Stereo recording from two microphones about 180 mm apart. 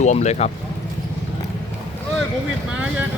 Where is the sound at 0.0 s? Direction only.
40° left (ahead or behind).